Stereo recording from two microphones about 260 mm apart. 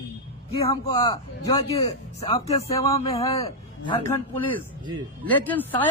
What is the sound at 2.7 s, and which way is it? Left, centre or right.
A man's voice, centre.